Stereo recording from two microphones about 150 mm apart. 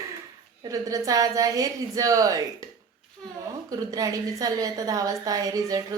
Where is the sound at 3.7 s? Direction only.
25° right (ahead or behind).